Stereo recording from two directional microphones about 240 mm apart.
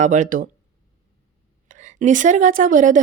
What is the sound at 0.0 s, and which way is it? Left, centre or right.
Speech, right.